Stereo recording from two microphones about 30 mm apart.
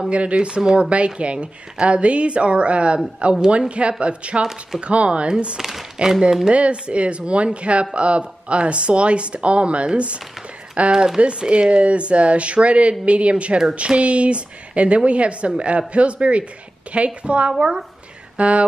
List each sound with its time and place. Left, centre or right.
0.1 s a woman's voice: right
5.6 s speech: centre
6.5 s a woman's voice: right
11.1 s a woman's voice: right
17.5 s speech: right
18.4 s a woman's voice: right